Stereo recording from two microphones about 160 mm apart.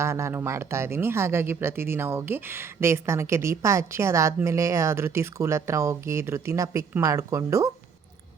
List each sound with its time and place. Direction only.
0.0 s speech: 15° right (ahead or behind)